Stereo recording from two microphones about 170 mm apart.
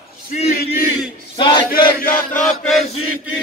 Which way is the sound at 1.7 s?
55° left (ahead or behind).